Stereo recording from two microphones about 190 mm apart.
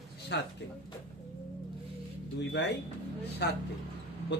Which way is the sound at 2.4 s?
65° left (ahead or behind).